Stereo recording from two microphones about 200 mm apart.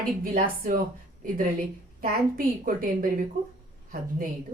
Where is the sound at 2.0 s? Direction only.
45° right (ahead or behind).